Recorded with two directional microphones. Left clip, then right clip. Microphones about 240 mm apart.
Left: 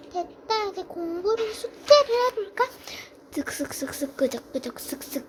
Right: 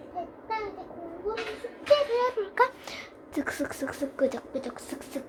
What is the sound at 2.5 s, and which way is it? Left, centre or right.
Speech, centre.